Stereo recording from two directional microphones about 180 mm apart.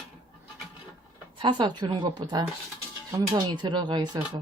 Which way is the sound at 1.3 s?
25° right (ahead or behind).